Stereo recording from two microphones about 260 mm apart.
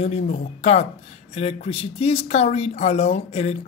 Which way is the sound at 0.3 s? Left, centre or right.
Left.